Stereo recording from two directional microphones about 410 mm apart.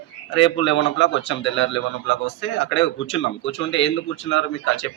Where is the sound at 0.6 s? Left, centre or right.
Left.